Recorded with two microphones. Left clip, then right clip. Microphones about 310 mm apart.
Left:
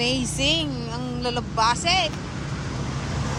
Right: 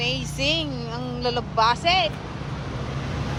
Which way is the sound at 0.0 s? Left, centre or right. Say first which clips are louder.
Left 2 dB; centre.